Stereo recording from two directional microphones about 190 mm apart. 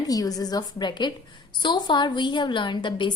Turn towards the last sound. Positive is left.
turn(degrees=25)  # may be behind; listen again after turning